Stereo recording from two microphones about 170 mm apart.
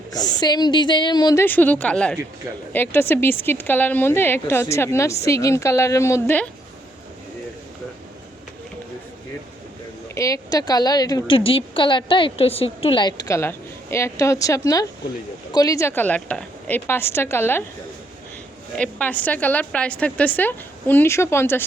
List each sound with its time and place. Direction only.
0.1 s a woman's voice: 25° left (ahead or behind)
1.5 s a woman's voice: 10° left (ahead or behind)
10.2 s a woman's voice: 20° left (ahead or behind)
18.8 s a woman's voice: 10° left (ahead or behind)